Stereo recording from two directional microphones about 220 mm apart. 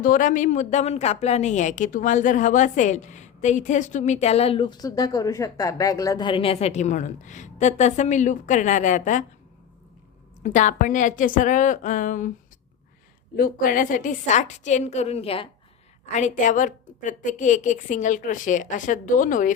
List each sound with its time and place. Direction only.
0.0 s a woman's voice: 35° left (ahead or behind)
10.4 s a woman's voice: 35° left (ahead or behind)
13.3 s a woman's voice: 40° left (ahead or behind)